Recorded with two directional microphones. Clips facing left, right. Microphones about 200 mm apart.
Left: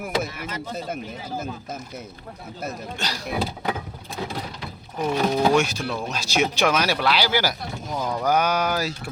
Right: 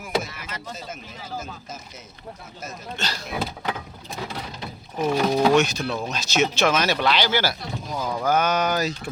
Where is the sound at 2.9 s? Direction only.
15° left (ahead or behind).